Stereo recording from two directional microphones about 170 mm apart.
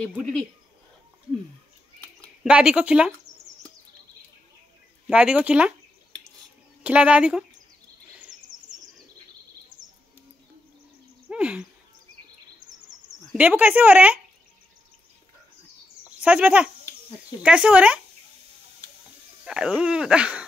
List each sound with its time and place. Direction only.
0.0 s speech: 5° left (ahead or behind)
2.4 s speech: 5° right (ahead or behind)
5.0 s speech: 5° right (ahead or behind)
6.8 s speech: 5° right (ahead or behind)
8.5 s bird: 20° right (ahead or behind)
11.2 s a sound: 5° right (ahead or behind)
13.3 s speech: 10° right (ahead or behind)
16.2 s speech: 10° right (ahead or behind)
19.4 s speech: 5° right (ahead or behind)